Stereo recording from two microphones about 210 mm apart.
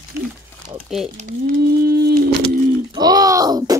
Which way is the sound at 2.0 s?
50° right (ahead or behind).